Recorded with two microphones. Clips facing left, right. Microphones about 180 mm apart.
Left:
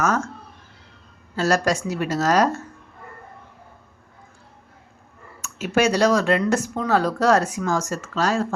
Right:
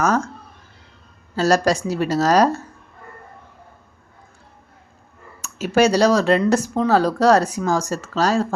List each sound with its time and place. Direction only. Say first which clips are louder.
0.0 s speech: right 3 dB; 35° right (ahead or behind)
1.4 s speech: right 3 dB; 35° right (ahead or behind)
5.4 s speech: right 4 dB; 35° right (ahead or behind)